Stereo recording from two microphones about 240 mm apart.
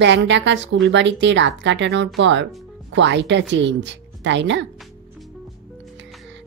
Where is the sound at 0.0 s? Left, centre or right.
Right.